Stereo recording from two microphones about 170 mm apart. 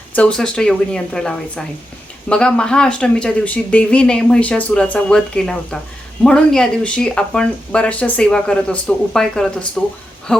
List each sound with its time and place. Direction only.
0.2 s speech: 5° left (ahead or behind)